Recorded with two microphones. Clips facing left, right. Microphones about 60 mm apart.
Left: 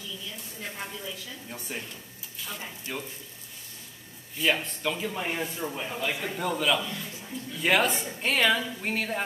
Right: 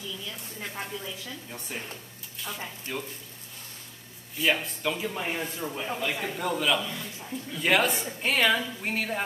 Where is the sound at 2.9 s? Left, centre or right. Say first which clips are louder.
Right 1 dB; centre.